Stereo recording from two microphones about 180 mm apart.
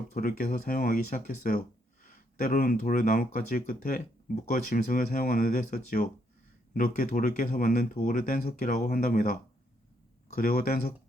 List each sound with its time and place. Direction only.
0.1 s speech: 55° left (ahead or behind)
10.3 s speech: 55° left (ahead or behind)